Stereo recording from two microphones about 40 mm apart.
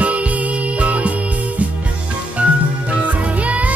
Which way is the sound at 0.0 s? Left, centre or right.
Right.